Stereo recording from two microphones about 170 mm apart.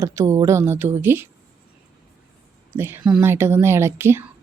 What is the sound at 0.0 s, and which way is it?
Speech, 15° right (ahead or behind).